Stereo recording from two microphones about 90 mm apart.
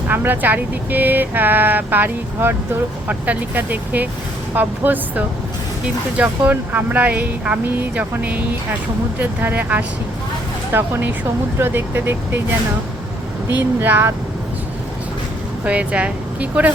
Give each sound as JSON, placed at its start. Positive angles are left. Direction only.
{"t": 0.1, "sound": "speech", "side_deg": -20}
{"t": 13.6, "sound": "speech", "side_deg": -20}
{"t": 15.6, "sound": "speech", "side_deg": -15}